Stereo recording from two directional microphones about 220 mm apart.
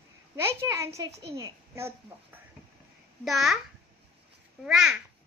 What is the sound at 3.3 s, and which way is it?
Speech, centre (ahead or behind).